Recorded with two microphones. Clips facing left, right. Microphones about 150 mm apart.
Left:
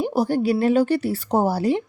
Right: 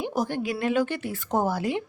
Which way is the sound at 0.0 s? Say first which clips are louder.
Left 7 dB; 35° left (ahead or behind).